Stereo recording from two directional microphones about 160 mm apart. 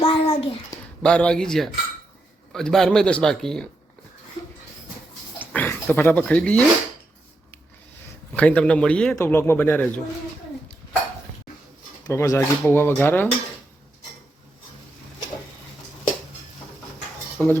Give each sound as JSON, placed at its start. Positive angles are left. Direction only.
{"t": 0.0, "sound": "a sound", "side_deg": 35}
{"t": 1.0, "sound": "a man's voice", "side_deg": 5}
{"t": 5.4, "sound": "speech", "side_deg": 10}
{"t": 8.3, "sound": "speech", "side_deg": 10}
{"t": 12.0, "sound": "speech", "side_deg": 20}
{"t": 17.3, "sound": "speech", "side_deg": 5}